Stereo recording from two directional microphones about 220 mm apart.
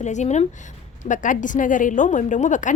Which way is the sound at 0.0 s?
30° left (ahead or behind).